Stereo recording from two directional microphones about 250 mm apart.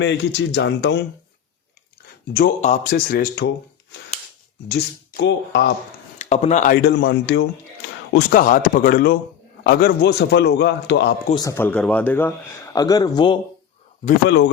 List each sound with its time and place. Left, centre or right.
0.0 s speech: left
2.3 s a man's voice: left
4.7 s speech: left
6.1 s speech: left
6.8 s speech: left
8.1 s a man's voice: left
11.3 s a man's voice: centre
14.3 s speech: left